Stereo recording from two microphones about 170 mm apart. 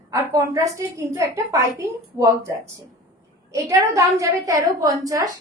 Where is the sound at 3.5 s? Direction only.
20° right (ahead or behind).